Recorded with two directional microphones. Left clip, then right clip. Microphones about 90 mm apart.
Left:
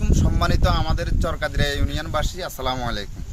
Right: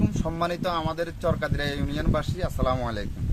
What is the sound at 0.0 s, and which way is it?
A man's voice, 25° right (ahead or behind).